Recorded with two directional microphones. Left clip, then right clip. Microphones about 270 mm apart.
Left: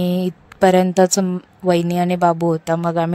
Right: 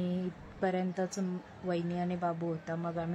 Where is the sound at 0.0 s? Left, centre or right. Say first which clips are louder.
Left 16 dB; left.